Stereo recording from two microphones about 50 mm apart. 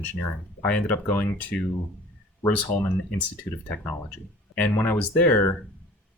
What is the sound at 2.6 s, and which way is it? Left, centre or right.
Speech, left.